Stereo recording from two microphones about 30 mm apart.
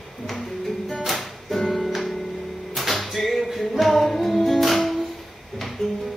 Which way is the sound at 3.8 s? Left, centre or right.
Centre.